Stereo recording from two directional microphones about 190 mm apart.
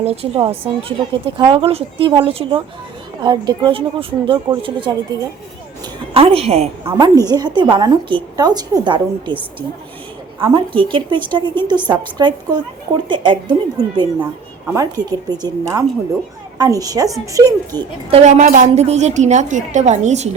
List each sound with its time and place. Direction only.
0.0 s a woman's voice: 30° right (ahead or behind)
6.1 s a woman's voice: 30° right (ahead or behind)
6.9 s a woman's voice: 20° right (ahead or behind)
17.4 s speech: 10° left (ahead or behind)
18.1 s a woman's voice: 40° right (ahead or behind)